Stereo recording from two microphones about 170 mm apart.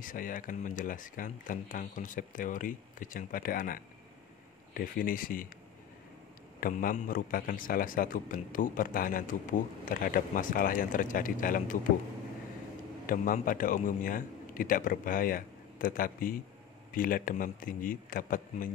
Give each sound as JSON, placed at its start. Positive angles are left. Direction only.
{"t": 0.0, "sound": "a man's voice", "side_deg": 55}
{"t": 6.6, "sound": "a man's voice", "side_deg": 55}
{"t": 13.0, "sound": "a man's voice", "side_deg": 55}